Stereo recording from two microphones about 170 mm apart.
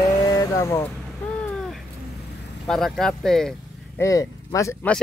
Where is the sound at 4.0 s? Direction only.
20° left (ahead or behind).